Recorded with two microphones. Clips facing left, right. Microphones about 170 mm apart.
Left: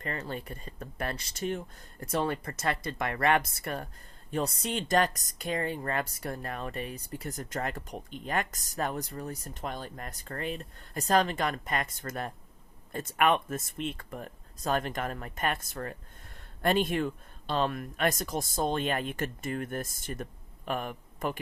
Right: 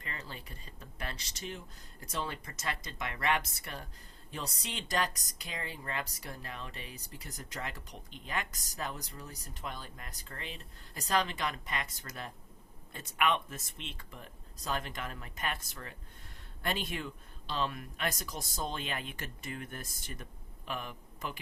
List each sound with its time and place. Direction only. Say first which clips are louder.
0.0 s a man's voice: left 9 dB; 50° left (ahead or behind)